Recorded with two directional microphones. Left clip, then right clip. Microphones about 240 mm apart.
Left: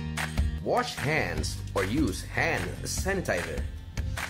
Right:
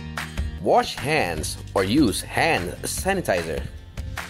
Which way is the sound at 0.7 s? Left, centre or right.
Right.